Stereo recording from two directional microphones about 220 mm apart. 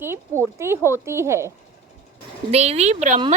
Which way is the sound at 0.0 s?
10° right (ahead or behind).